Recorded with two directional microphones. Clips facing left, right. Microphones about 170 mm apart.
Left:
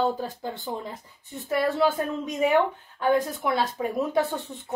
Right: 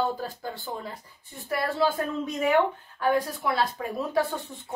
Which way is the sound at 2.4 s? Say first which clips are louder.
Left 1 dB; 20° left (ahead or behind).